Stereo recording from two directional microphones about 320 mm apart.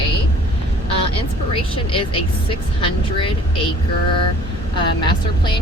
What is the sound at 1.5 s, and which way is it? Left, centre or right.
Speech, centre.